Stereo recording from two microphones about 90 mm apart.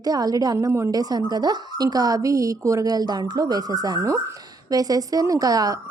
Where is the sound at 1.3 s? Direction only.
50° right (ahead or behind).